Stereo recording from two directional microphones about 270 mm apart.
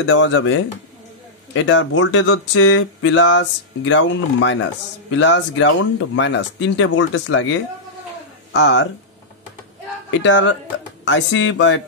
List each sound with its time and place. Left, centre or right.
0.0 s speech: left
10.2 s speech: left